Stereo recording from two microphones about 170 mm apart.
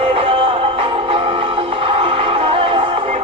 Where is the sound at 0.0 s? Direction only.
35° right (ahead or behind).